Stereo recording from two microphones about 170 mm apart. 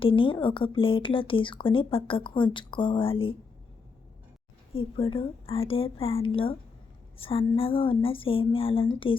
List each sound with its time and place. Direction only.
0.0 s a woman's voice: 30° left (ahead or behind)
4.7 s a woman's voice: 30° left (ahead or behind)